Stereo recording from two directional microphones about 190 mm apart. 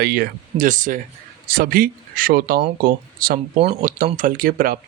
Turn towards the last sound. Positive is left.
turn(degrees=-50)  # may be behind; listen again after turning